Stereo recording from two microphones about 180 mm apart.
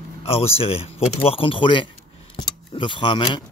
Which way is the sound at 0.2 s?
35° left (ahead or behind).